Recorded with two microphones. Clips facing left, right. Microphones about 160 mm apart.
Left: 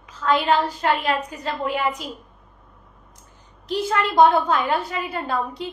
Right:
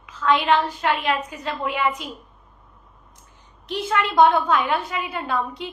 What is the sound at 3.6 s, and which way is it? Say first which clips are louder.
A woman's voice: left 1 dB; 40° left (ahead or behind).